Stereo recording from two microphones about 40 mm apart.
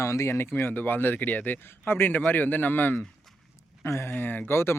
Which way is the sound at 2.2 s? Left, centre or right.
Left.